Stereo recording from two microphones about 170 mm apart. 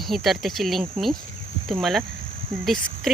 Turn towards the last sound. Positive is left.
turn(degrees=0)  # may be behind; listen again after turning